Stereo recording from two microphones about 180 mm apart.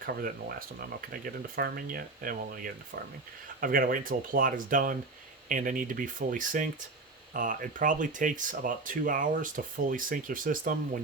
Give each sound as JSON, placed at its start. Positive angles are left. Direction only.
{"t": 0.0, "sound": "speech", "side_deg": -55}